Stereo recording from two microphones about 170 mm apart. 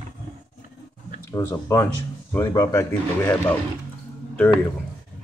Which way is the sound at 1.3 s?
15° left (ahead or behind).